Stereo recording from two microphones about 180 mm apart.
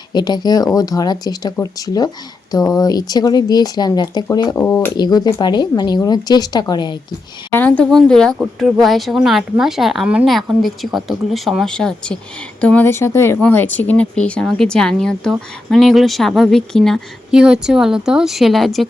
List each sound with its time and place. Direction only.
0.1 s speech: 25° left (ahead or behind)
4.9 s speech: 25° left (ahead or behind)
7.5 s speech: 10° left (ahead or behind)